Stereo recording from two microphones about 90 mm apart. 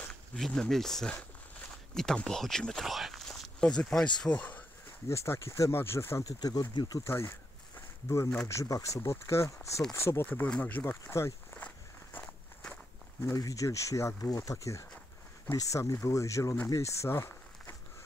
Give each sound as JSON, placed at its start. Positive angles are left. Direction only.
{"t": 0.1, "sound": "speech", "side_deg": 5}
{"t": 5.0, "sound": "speech", "side_deg": 30}
{"t": 6.4, "sound": "speech", "side_deg": 45}
{"t": 7.1, "sound": "speech", "side_deg": 30}
{"t": 8.5, "sound": "speech", "side_deg": 35}
{"t": 11.6, "sound": "walk", "side_deg": 15}
{"t": 13.2, "sound": "speech", "side_deg": 40}